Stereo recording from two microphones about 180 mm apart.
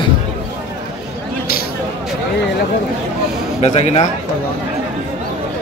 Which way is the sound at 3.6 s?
40° left (ahead or behind).